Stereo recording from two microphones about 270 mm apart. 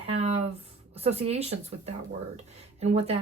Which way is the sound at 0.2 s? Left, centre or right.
Right.